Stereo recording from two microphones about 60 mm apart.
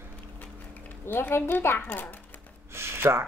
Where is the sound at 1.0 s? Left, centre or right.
Left.